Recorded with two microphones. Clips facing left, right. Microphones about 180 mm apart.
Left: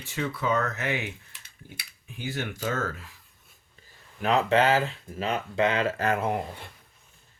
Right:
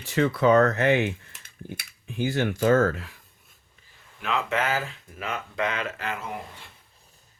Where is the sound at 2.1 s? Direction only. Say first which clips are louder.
Right 8 dB; 70° right (ahead or behind).